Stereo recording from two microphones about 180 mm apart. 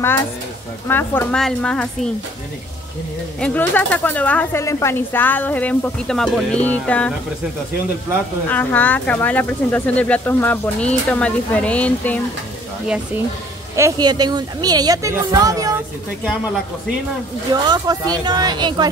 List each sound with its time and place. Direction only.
0.8 s a woman's voice: 10° left (ahead or behind)
3.3 s speech: 10° left (ahead or behind)
8.5 s speech: 10° left (ahead or behind)
13.7 s speech: 20° right (ahead or behind)
17.5 s speech: 20° right (ahead or behind)